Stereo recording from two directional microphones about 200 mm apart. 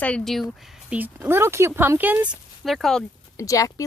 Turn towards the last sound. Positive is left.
turn(degrees=15)  # may be behind; listen again after turning